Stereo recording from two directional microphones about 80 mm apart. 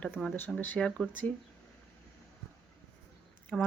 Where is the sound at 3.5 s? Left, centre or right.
Centre.